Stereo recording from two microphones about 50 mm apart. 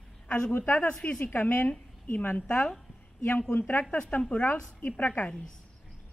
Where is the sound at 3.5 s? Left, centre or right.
Left.